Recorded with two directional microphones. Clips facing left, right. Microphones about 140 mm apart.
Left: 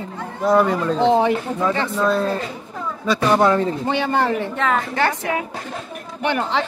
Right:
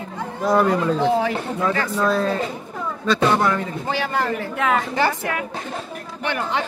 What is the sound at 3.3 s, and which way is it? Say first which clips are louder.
Speech: left 5 dB; 25° left (ahead or behind).